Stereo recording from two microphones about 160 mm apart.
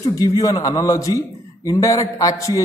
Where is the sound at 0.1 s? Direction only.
20° left (ahead or behind).